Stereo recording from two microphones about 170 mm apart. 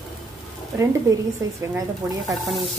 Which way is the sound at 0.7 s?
20° right (ahead or behind).